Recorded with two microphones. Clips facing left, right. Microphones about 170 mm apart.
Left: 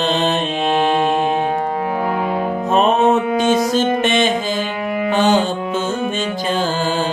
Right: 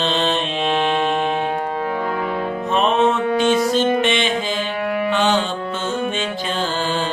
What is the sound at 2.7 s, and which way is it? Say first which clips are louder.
Music: left 3 dB; 40° left (ahead or behind).